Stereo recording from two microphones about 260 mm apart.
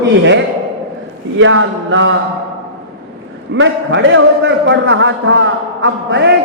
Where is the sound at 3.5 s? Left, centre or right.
Right.